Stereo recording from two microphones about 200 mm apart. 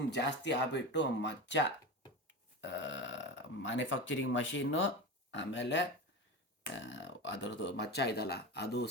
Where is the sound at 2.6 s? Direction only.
65° left (ahead or behind).